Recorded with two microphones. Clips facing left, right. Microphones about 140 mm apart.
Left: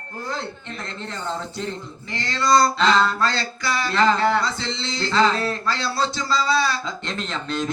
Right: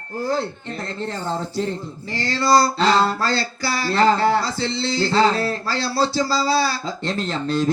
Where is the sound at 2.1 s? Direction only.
35° right (ahead or behind).